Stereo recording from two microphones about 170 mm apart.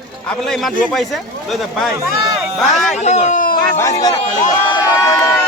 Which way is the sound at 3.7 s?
15° left (ahead or behind).